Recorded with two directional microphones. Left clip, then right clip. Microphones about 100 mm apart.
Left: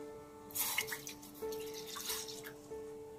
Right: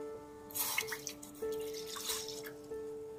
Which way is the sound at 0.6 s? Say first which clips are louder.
Right 1 dB; 10° right (ahead or behind).